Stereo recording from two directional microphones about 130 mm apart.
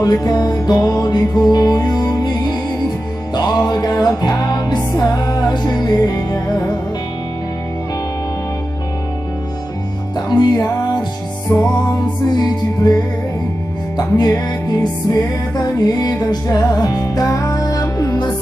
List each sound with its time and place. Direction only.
0.0 s music: 30° left (ahead or behind)
10.1 s music: 30° left (ahead or behind)
12.3 s music: 30° left (ahead or behind)